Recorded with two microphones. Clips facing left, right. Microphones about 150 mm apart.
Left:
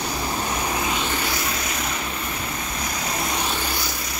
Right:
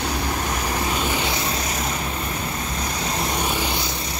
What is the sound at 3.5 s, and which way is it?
Vehicle, 20° right (ahead or behind).